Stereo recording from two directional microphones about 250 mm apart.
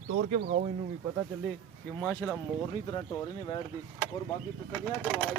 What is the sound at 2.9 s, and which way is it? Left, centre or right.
Speech, centre.